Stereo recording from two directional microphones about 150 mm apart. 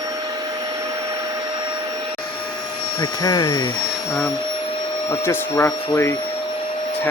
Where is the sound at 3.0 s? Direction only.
25° left (ahead or behind).